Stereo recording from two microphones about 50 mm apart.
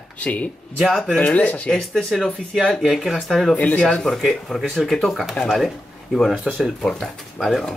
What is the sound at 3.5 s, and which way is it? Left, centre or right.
Speech, left.